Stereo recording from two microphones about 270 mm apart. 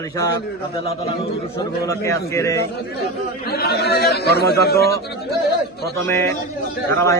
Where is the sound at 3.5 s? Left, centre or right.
Left.